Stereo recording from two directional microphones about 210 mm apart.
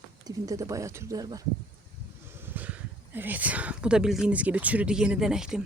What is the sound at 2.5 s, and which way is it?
Speech, 10° right (ahead or behind).